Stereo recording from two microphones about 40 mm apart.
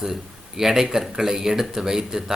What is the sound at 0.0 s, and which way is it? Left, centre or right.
A man's voice, centre.